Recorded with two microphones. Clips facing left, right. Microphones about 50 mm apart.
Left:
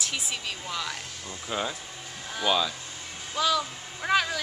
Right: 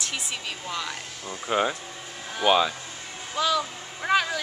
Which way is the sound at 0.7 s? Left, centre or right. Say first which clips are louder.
Right 2 dB; centre.